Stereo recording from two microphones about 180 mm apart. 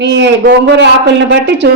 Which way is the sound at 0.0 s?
75° right (ahead or behind).